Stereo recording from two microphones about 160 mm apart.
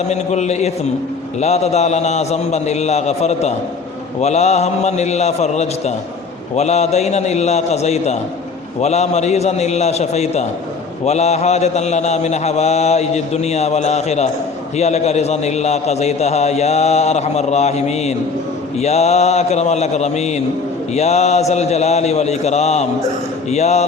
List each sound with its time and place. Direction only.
0.1 s a man's voice: 45° left (ahead or behind)